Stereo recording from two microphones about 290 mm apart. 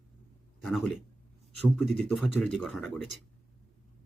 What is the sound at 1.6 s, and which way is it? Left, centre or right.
Speech, centre.